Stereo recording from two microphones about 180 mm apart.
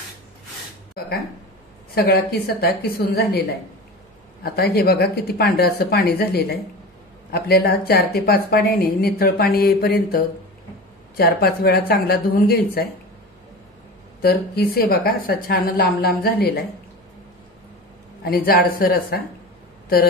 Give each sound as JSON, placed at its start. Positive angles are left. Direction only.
{"t": 2.0, "sound": "a woman's voice", "side_deg": 60}
{"t": 14.2, "sound": "a woman's voice", "side_deg": 60}
{"t": 18.2, "sound": "a woman's voice", "side_deg": 60}